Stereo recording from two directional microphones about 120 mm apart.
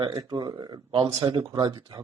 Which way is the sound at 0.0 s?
35° right (ahead or behind).